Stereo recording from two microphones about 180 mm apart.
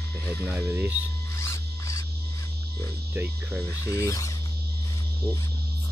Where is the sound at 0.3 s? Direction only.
10° right (ahead or behind).